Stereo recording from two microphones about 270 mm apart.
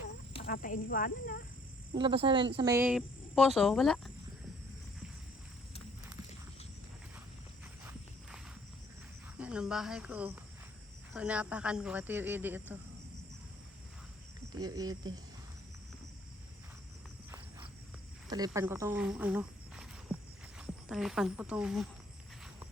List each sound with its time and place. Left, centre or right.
0.4 s speech: left
2.0 s speech: centre
9.4 s speech: centre
14.5 s speech: centre
18.3 s speech: centre